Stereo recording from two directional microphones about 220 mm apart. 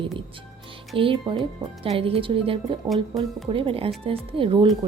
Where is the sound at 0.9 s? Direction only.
25° right (ahead or behind).